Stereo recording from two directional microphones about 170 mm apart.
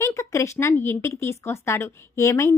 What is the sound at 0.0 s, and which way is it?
Speech, 20° left (ahead or behind).